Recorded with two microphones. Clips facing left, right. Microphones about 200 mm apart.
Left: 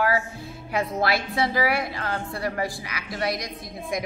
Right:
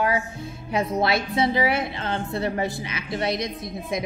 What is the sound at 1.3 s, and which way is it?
A woman's voice, 25° right (ahead or behind).